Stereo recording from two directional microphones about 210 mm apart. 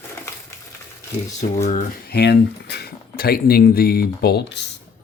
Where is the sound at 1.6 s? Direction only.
40° left (ahead or behind); by 4.7 s 55° left (ahead or behind).